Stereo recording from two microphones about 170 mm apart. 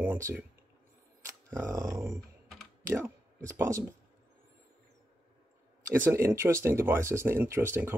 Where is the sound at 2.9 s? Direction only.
15° right (ahead or behind).